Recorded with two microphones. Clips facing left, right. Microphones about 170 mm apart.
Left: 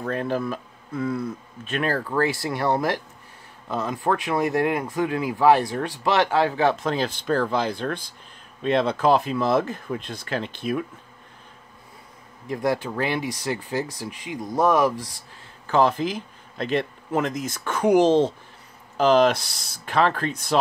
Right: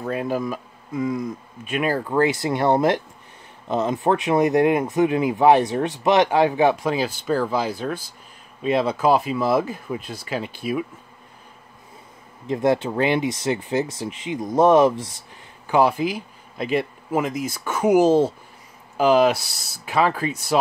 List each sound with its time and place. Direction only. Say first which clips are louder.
0.0 s speech: right 1 dB; 10° right (ahead or behind)
12.4 s speech: right 4 dB; 25° right (ahead or behind)